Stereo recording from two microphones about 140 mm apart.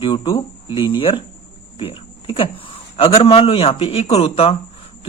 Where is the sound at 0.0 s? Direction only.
35° left (ahead or behind).